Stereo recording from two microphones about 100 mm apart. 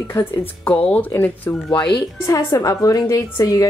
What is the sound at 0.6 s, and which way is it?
Speech, 15° left (ahead or behind).